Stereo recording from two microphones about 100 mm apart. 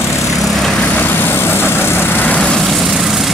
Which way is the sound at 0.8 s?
20° left (ahead or behind).